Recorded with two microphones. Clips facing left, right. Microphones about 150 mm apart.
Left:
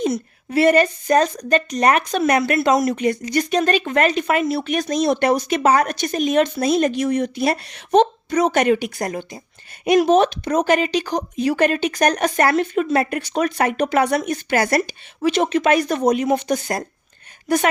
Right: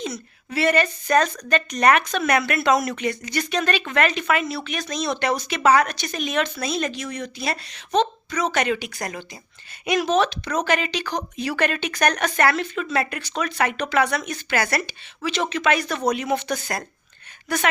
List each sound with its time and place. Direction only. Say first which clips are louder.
0.0 s a woman's voice: left 9 dB; 50° left (ahead or behind)
1.0 s speech: left 3 dB; 35° left (ahead or behind)